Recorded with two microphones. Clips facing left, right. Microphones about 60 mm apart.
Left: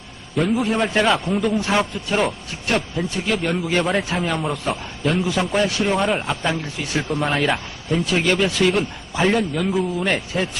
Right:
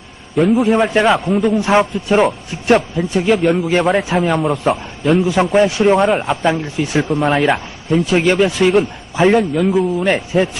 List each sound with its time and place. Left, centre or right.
0.3 s a man's voice: centre
1.5 s a man's voice: right
3.2 s a man's voice: centre
5.2 s a man's voice: right
6.0 s a man's voice: centre
6.4 s a man's voice: right
7.1 s a man's voice: centre
8.1 s a man's voice: right
9.1 s a man's voice: centre
10.1 s a man's voice: right